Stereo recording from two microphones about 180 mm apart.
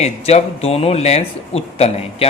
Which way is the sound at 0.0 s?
35° left (ahead or behind).